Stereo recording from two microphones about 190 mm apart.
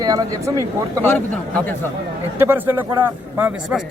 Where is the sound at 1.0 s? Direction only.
10° left (ahead or behind).